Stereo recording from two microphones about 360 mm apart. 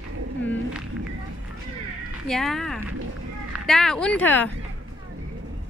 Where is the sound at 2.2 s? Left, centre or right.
Centre.